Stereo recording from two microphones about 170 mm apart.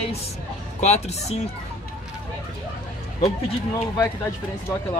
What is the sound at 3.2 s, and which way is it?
Speech, 40° left (ahead or behind).